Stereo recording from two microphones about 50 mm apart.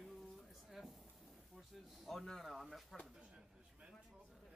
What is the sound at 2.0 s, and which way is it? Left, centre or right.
Speech, centre.